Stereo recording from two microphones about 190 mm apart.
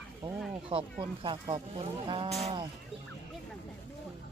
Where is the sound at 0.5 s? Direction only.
30° right (ahead or behind).